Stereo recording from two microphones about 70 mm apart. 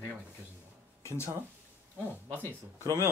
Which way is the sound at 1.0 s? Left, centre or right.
Left.